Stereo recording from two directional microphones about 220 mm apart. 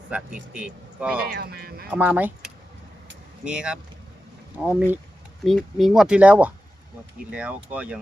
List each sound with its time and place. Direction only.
0.1 s speech: 5° right (ahead or behind)
1.3 s speech: 45° right (ahead or behind)
1.9 s speech: 5° right (ahead or behind)